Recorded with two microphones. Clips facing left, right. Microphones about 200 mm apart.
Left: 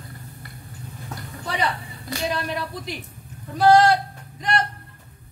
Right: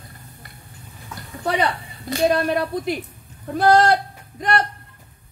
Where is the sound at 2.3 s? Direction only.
50° right (ahead or behind).